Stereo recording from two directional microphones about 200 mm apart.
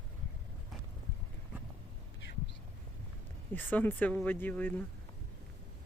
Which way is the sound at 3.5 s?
10° left (ahead or behind).